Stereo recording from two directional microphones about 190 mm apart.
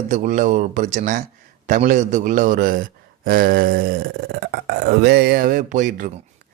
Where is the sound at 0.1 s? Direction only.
40° right (ahead or behind).